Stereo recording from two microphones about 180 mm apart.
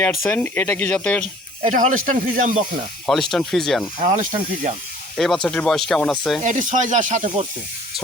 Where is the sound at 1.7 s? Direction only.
50° right (ahead or behind).